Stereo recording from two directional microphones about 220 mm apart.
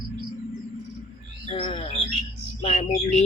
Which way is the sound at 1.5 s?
25° left (ahead or behind).